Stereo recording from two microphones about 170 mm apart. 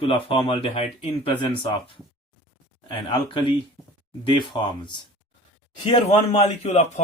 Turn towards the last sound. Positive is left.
turn(degrees=40)  # may be behind; listen again after turning